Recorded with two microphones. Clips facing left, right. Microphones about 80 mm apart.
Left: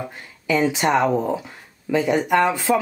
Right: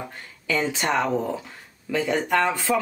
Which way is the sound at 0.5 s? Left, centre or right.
Centre.